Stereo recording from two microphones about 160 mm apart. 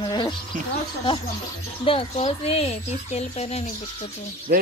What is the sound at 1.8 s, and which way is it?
Speech, 35° left (ahead or behind).